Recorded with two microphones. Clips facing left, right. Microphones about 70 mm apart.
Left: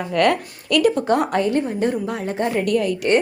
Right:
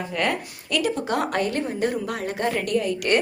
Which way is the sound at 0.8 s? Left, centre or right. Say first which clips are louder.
Left 8 dB; left.